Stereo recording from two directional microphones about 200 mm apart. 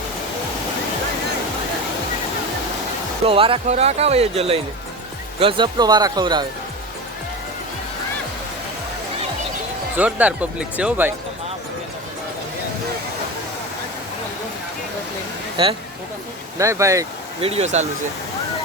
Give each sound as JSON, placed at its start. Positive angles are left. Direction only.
{"t": 3.2, "sound": "speech", "side_deg": -25}
{"t": 10.0, "sound": "speech", "side_deg": -5}
{"t": 15.6, "sound": "speech", "side_deg": -25}
{"t": 16.6, "sound": "speech", "side_deg": -15}
{"t": 17.4, "sound": "speech", "side_deg": -30}